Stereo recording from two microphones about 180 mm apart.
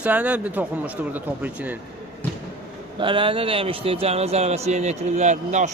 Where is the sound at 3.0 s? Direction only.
30° right (ahead or behind).